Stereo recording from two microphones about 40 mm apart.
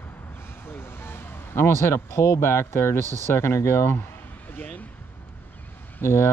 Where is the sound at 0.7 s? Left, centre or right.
Left.